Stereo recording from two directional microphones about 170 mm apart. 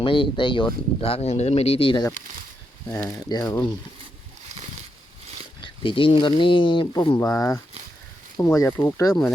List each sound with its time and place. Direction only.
0.0 s speech: 30° left (ahead or behind)
5.5 s speech: 30° left (ahead or behind)
7.2 s speech: 20° left (ahead or behind)